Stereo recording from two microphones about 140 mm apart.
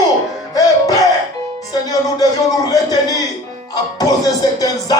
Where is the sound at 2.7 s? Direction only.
25° left (ahead or behind).